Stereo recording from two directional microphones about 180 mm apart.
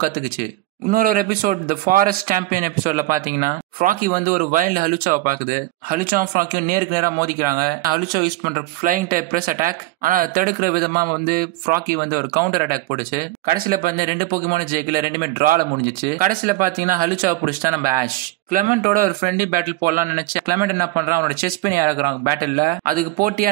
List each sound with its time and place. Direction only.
0.0 s speech: 50° right (ahead or behind)
6.9 s a man's voice: 20° right (ahead or behind)
8.8 s speech: 50° right (ahead or behind)
13.7 s speech: 50° right (ahead or behind)
20.5 s a man's voice: 15° right (ahead or behind)
22.8 s speech: 50° right (ahead or behind)